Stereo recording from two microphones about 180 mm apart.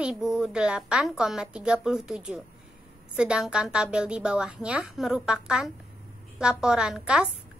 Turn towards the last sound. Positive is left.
turn(degrees=-5)  # may be behind; listen again after turning